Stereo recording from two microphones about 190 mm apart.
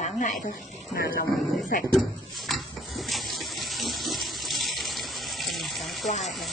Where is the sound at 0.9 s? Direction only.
50° left (ahead or behind).